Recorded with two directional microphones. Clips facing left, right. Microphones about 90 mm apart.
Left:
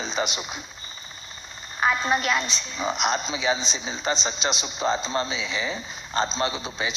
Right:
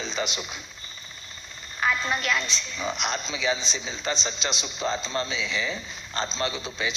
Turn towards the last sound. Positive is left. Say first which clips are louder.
# left 1 dB
turn(degrees=20)  # may be behind; listen again after turning